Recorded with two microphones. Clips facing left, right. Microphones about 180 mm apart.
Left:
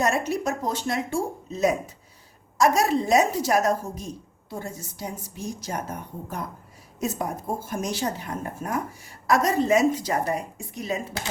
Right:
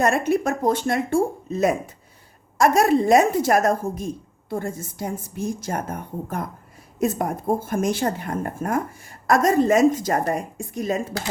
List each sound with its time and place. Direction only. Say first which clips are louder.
0.0 s a woman's voice: right 4 dB; 55° right (ahead or behind)